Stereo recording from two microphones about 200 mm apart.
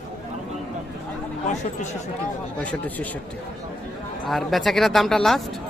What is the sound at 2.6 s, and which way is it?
Speech, 5° left (ahead or behind).